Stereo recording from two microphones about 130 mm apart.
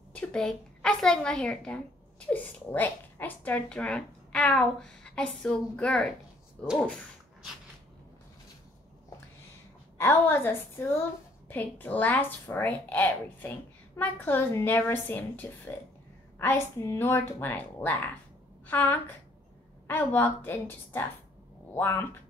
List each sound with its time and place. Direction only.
0.1 s a woman's voice: 10° left (ahead or behind)
9.9 s a woman's voice: 20° left (ahead or behind)